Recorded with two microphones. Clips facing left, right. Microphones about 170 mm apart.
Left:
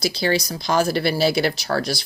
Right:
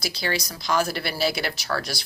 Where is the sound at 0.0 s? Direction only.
30° left (ahead or behind).